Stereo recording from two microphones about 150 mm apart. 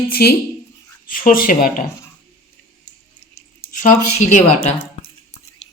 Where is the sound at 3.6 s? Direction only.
60° left (ahead or behind).